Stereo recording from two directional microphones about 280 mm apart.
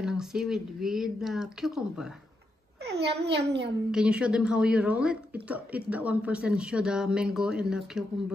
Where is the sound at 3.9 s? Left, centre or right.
Centre.